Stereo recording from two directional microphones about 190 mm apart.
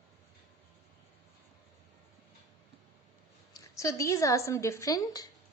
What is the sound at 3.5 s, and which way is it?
A woman's voice, 15° left (ahead or behind).